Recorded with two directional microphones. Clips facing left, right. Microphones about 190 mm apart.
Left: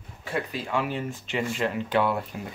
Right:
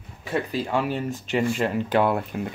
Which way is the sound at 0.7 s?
40° right (ahead or behind).